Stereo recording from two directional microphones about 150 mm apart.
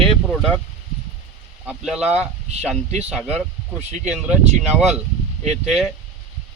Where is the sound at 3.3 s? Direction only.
50° right (ahead or behind).